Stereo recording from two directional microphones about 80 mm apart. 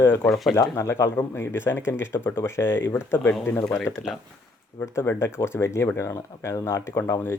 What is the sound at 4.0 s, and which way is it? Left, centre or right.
Speech, left.